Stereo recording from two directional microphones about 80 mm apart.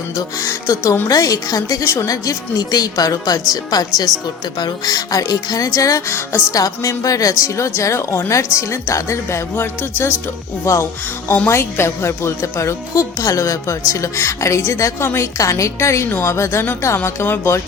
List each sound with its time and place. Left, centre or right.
0.2 s a woman's voice: left
6.6 s a woman's voice: left